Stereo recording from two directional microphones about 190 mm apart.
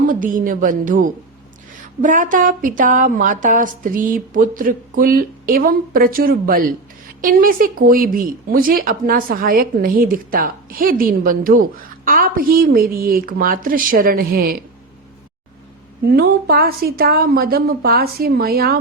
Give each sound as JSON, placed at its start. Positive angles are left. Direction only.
{"t": 0.1, "sound": "speech", "side_deg": -45}
{"t": 16.0, "sound": "speech", "side_deg": -55}